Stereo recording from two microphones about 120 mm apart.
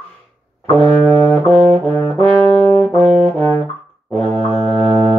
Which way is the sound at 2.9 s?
55° right (ahead or behind).